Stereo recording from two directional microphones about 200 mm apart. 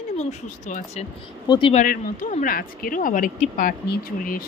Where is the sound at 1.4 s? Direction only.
25° left (ahead or behind).